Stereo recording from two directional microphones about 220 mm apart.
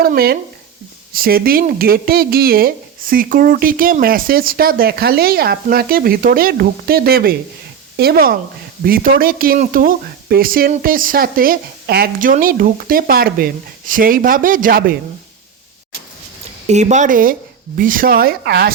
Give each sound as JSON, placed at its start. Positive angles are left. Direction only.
{"t": 0.0, "sound": "speech", "side_deg": -45}
{"t": 16.6, "sound": "speech", "side_deg": -30}